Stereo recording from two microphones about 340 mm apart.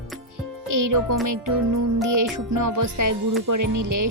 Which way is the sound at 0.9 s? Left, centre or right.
Right.